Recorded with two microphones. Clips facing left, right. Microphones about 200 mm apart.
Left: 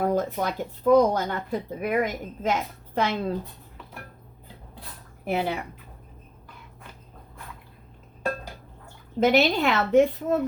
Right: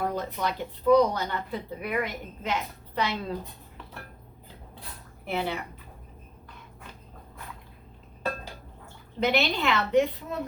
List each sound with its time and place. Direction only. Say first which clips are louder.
0.0 s a woman's voice: left 5 dB; 50° left (ahead or behind)
5.2 s speech: left 4 dB; 45° left (ahead or behind)
9.2 s a woman's voice: left 5 dB; 45° left (ahead or behind)